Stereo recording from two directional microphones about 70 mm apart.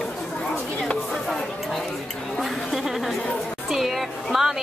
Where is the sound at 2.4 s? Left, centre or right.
Centre.